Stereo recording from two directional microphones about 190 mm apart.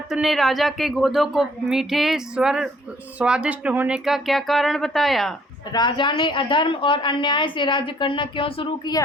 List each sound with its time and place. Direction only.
0.1 s speech: centre (ahead or behind)
5.7 s speech: 25° left (ahead or behind)